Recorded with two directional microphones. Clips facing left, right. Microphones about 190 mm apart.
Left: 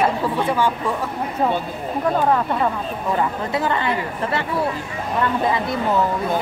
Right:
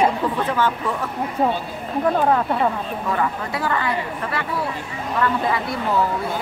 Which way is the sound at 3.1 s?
20° left (ahead or behind).